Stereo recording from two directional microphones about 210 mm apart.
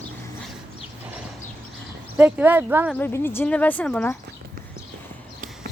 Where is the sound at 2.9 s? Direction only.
10° left (ahead or behind).